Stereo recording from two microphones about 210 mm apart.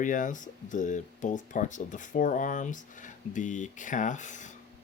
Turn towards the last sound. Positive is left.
turn(degrees=35)  # may be behind; listen again after turning